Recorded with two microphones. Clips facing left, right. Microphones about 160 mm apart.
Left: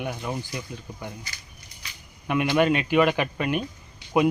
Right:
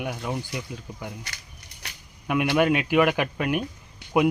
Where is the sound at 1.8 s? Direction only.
70° right (ahead or behind).